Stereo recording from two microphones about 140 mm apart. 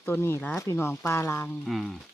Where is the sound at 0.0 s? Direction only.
15° left (ahead or behind).